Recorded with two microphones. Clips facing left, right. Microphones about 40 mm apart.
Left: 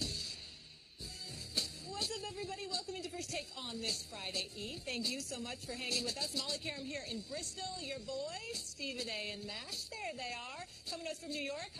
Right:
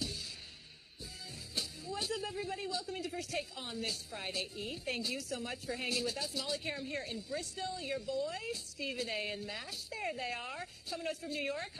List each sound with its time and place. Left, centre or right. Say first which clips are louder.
1.5 s speech: right 2 dB; centre